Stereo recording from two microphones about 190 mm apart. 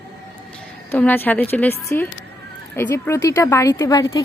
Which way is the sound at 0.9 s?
10° left (ahead or behind).